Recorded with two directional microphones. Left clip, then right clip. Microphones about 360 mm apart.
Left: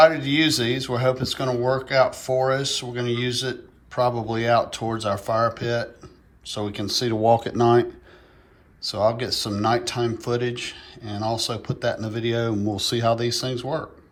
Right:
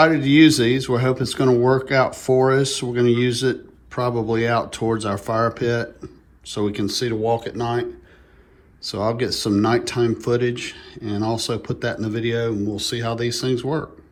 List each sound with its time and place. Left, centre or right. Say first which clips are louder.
0.0 s speech: right 2 dB; centre
8.8 s speech: left 1 dB; centre